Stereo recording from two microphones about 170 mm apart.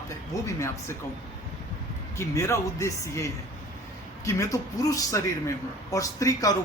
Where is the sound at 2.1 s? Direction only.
15° left (ahead or behind).